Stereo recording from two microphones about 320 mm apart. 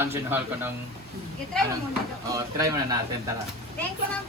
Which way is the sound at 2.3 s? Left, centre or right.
Centre.